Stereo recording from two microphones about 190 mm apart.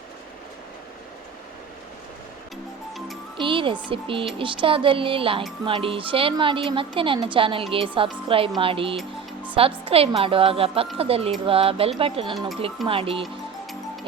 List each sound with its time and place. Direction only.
3.3 s music: 25° right (ahead or behind)
3.8 s speech: 30° right (ahead or behind)
9.0 s music: 10° right (ahead or behind)
9.6 s speech: 30° right (ahead or behind)
13.2 s music: centre (ahead or behind)